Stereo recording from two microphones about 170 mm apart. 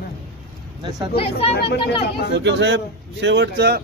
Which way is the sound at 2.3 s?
90° right.